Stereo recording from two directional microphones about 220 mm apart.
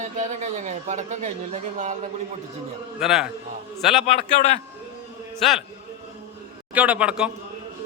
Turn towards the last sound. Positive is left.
turn(degrees=-5)  # may be behind; listen again after turning